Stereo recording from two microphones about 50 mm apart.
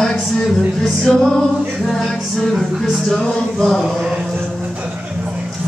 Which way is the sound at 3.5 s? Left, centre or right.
Centre.